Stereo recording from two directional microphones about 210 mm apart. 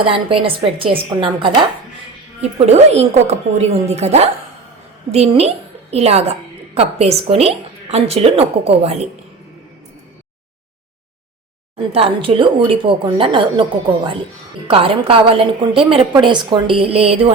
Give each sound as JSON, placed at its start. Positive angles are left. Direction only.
{"t": 0.0, "sound": "a woman's voice", "side_deg": -25}
{"t": 2.6, "sound": "a woman's voice", "side_deg": -30}
{"t": 11.9, "sound": "a woman's voice", "side_deg": -25}